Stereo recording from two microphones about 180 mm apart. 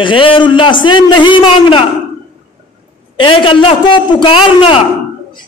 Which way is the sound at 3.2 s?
30° left (ahead or behind).